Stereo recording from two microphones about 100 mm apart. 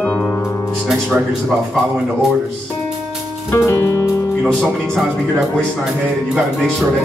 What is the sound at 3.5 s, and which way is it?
Music, 25° left (ahead or behind).